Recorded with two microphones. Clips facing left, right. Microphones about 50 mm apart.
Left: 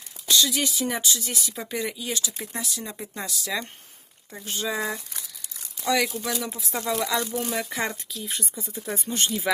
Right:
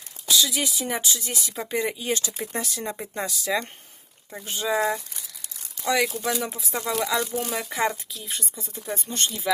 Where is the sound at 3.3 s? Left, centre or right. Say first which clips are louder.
Right 4 dB; right.